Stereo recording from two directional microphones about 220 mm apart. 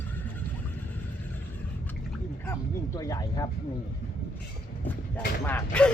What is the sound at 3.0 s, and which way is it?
Speech, 15° left (ahead or behind).